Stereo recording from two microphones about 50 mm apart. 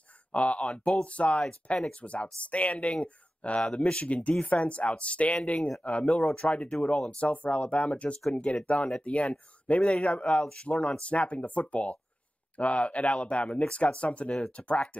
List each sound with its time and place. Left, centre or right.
0.3 s speech: left
6.0 s speech: centre